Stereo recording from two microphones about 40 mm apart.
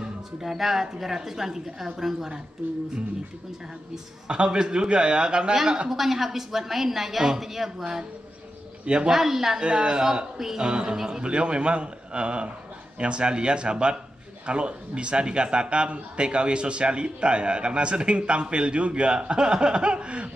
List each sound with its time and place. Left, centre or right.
0.5 s a woman's voice: centre
4.3 s speech: right
5.9 s a woman's voice: centre
8.8 s a man's voice: right
9.1 s a woman's voice: centre
9.6 s a man's voice: right
10.6 s speech: right